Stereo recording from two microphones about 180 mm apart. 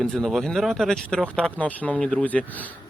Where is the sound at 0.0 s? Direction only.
Centre (ahead or behind).